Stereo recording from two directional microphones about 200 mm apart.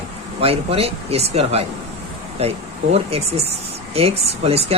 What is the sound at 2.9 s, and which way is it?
Speech, 30° right (ahead or behind).